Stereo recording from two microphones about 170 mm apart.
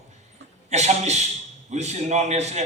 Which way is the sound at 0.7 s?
40° right (ahead or behind).